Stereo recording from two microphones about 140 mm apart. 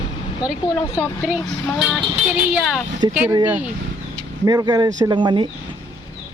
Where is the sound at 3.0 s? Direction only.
35° right (ahead or behind).